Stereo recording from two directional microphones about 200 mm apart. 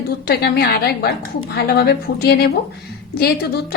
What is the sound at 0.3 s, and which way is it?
A woman's voice, 50° left (ahead or behind).